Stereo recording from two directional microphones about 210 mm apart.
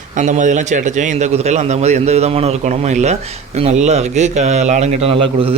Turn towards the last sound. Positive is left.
turn(degrees=-30)  # may be behind; listen again after turning